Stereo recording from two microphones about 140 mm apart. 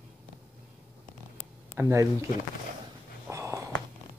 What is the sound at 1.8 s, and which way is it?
Speech, 20° right (ahead or behind).